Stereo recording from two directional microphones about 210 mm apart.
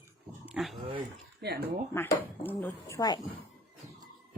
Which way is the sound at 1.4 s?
50° right (ahead or behind).